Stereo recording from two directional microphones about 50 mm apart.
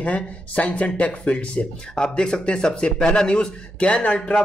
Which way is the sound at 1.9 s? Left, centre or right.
Centre.